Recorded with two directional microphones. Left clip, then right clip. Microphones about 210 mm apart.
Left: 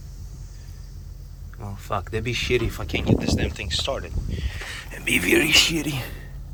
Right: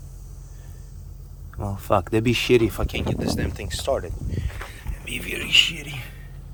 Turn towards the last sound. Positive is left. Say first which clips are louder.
# left 6 dB
turn(degrees=30)  # may be behind; listen again after turning